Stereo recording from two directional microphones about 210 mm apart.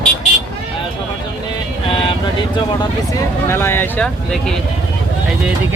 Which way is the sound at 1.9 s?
25° left (ahead or behind).